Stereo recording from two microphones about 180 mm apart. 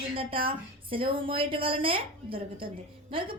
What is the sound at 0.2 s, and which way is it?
A woman's voice, 30° right (ahead or behind).